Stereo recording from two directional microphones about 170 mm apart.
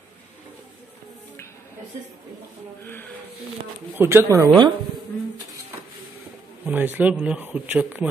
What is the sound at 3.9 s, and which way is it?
Speech, 15° right (ahead or behind).